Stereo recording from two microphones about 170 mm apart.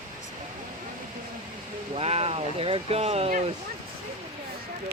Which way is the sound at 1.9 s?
35° right (ahead or behind).